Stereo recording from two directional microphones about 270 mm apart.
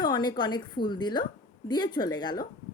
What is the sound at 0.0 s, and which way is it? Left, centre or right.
A woman's voice, centre.